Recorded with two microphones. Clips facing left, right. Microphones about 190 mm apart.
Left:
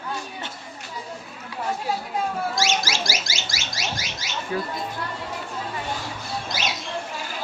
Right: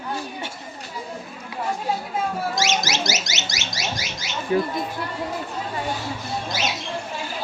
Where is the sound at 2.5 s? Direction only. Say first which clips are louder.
Right 1 dB; 20° right (ahead or behind).